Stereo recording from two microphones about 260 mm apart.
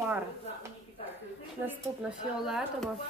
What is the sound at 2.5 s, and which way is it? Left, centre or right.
Speech, centre.